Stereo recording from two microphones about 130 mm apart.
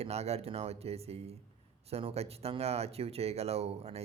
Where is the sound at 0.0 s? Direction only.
55° right (ahead or behind).